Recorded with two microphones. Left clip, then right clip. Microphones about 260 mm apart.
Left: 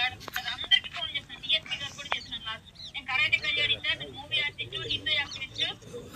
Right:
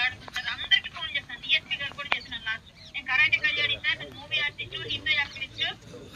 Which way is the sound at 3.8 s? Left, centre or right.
Centre.